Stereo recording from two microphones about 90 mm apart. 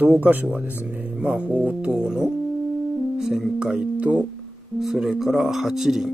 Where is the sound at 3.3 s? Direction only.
10° right (ahead or behind).